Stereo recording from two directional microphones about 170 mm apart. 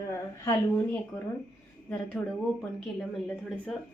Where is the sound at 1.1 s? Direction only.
20° left (ahead or behind).